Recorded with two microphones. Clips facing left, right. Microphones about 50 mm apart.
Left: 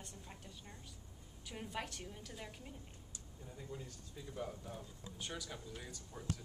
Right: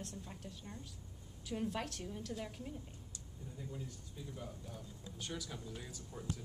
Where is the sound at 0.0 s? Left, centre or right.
Centre.